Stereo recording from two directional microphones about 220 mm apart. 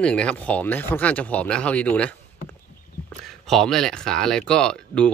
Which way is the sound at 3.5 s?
Centre (ahead or behind).